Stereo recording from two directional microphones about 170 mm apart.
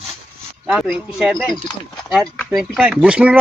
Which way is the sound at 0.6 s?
Centre (ahead or behind).